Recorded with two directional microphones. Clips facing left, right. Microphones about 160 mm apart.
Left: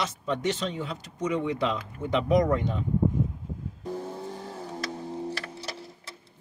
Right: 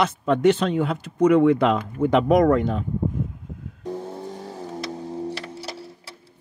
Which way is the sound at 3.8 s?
20° right (ahead or behind).